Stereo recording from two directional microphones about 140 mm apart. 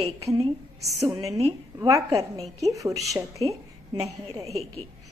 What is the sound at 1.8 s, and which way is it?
A woman's voice, 25° right (ahead or behind).